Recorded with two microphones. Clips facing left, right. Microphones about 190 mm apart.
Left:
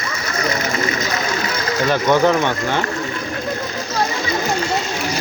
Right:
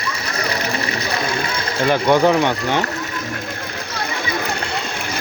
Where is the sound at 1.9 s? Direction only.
15° right (ahead or behind).